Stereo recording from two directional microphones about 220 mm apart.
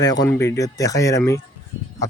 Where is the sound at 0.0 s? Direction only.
15° left (ahead or behind).